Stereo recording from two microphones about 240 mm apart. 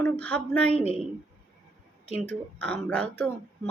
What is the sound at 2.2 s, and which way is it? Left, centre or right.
A woman's voice, centre.